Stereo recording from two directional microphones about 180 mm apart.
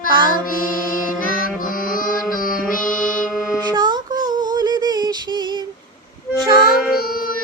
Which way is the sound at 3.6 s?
25° right (ahead or behind).